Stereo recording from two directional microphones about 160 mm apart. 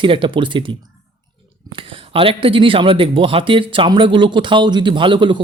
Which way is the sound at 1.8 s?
35° right (ahead or behind).